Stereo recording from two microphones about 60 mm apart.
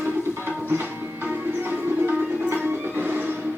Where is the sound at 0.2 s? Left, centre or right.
Right.